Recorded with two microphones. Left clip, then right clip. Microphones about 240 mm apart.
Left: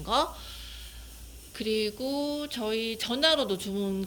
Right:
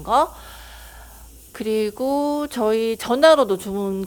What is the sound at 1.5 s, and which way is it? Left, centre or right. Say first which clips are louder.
Speech: right 7 dB; centre.